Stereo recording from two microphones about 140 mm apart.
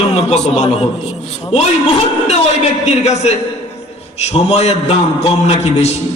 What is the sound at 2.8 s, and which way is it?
A man's voice, 55° left (ahead or behind).